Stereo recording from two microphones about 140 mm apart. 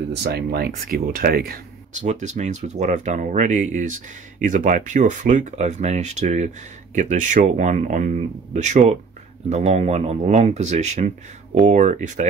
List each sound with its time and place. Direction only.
0.6 s speech: 90° right
2.0 s speech: 60° right (ahead or behind)